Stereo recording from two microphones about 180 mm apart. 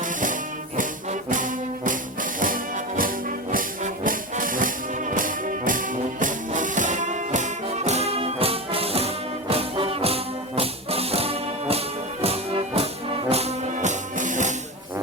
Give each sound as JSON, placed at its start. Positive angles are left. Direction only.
{"t": 1.3, "sound": "music", "side_deg": -45}